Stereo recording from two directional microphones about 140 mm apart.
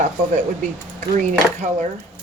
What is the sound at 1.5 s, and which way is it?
Speech, 60° right (ahead or behind).